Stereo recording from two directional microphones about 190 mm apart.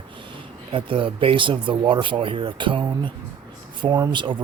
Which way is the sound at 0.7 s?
25° right (ahead or behind).